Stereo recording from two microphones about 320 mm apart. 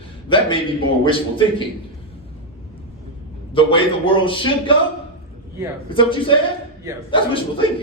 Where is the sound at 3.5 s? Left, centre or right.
Centre.